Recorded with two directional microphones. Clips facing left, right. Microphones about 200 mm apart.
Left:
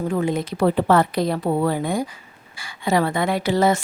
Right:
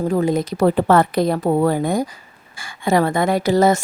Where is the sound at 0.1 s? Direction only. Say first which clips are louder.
Right 4 dB; 40° right (ahead or behind).